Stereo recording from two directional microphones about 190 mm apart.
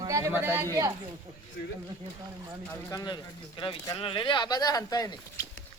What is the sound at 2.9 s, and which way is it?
Speech, 20° left (ahead or behind).